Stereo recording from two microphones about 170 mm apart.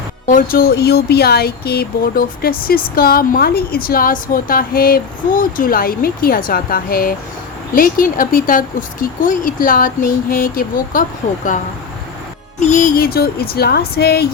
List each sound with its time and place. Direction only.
0.3 s speech: 55° left (ahead or behind)
12.5 s music: 45° left (ahead or behind)
13.0 s speech: 65° left (ahead or behind)